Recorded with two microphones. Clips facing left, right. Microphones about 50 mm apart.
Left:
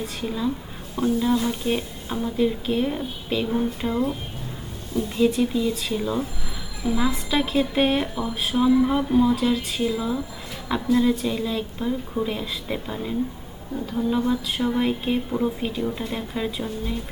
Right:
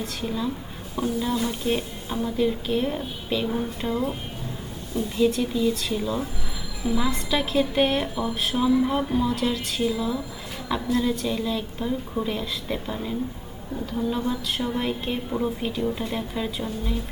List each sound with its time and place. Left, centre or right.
0.0 s speech: centre
5.3 s speech: centre